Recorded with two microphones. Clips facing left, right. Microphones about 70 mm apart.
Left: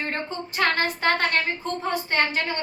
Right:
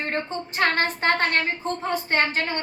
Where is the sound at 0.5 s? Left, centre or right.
Right.